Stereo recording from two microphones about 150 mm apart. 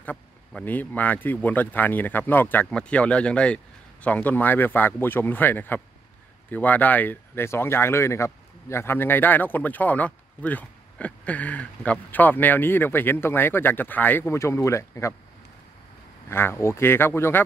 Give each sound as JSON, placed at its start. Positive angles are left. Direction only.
{"t": 0.5, "sound": "speech", "side_deg": 10}
{"t": 16.3, "sound": "speech", "side_deg": 15}